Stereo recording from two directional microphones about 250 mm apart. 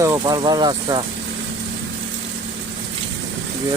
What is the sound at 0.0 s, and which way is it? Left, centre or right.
Speech, centre.